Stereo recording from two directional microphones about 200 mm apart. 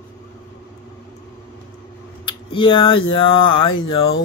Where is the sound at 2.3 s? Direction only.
25° left (ahead or behind).